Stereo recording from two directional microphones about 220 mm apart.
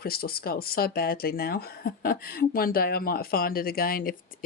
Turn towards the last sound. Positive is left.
turn(degrees=40)  # may be behind; listen again after turning